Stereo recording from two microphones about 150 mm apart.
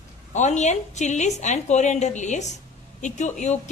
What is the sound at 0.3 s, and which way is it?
A woman's voice, 50° left (ahead or behind).